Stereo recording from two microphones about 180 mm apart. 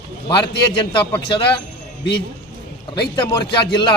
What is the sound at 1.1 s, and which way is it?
Speech, 25° left (ahead or behind).